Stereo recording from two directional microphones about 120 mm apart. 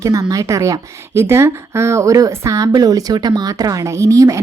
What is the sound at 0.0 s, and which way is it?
A woman's voice, 30° right (ahead or behind).